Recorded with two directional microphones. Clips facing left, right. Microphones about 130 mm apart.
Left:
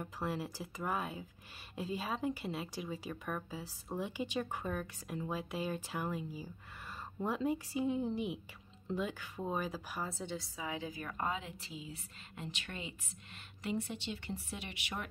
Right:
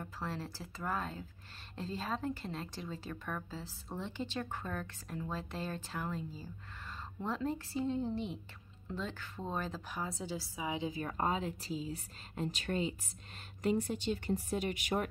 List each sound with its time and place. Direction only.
0.0 s a woman's voice: 10° left (ahead or behind); by 10.6 s 5° right (ahead or behind)
10.6 s a woman's voice: 20° right (ahead or behind); by 15.0 s 45° right (ahead or behind)